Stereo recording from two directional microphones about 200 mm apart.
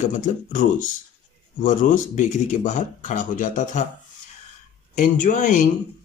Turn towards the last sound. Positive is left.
turn(degrees=40)  # may be behind; listen again after turning